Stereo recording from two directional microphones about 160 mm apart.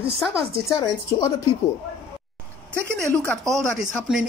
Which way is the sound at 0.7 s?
25° left (ahead or behind).